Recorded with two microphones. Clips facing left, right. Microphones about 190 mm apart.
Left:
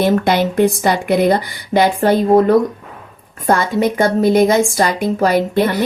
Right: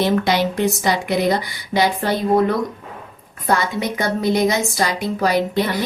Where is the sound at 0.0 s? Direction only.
50° left (ahead or behind).